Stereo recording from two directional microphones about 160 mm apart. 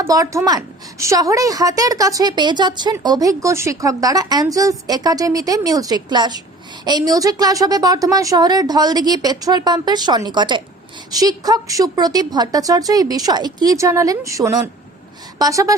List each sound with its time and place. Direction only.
0.1 s a woman's voice: 20° right (ahead or behind)